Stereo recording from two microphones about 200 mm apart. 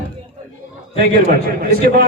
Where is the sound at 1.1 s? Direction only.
45° right (ahead or behind).